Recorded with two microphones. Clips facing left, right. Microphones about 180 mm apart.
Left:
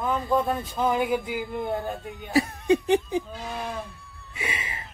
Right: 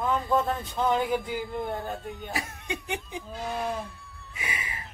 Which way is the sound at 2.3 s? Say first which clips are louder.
Left 15 dB; 35° left (ahead or behind).